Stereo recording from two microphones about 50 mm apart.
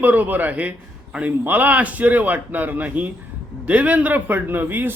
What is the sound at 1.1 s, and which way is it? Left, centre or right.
Speech, right.